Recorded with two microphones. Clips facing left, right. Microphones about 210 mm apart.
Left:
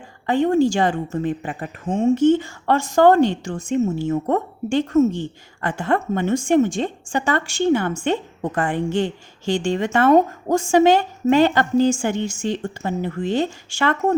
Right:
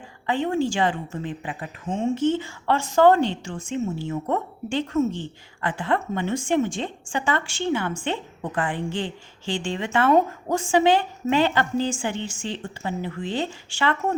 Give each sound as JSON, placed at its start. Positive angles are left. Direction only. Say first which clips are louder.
{"t": 0.3, "sound": "a woman's voice", "louder": "left 6 dB", "side_deg": 40}